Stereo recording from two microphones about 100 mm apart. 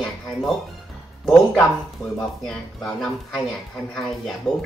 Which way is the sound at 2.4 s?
5° left (ahead or behind).